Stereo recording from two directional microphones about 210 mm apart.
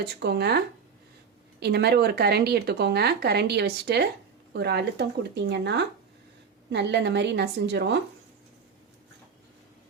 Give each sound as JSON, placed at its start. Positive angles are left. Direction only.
{"t": 0.0, "sound": "a woman's voice", "side_deg": -50}